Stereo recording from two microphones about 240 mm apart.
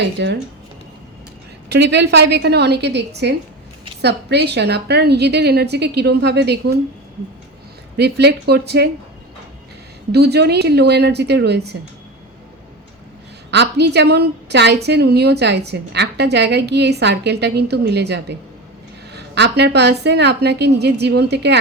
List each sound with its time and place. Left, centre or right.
0.0 s a woman's voice: right
1.7 s a woman's voice: right
7.9 s a woman's voice: right
10.1 s a woman's voice: right
13.5 s a woman's voice: right